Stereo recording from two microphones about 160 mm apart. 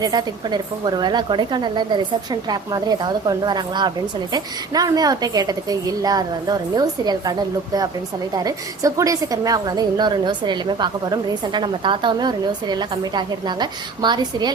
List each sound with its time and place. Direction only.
0.0 s a woman's voice: 25° right (ahead or behind)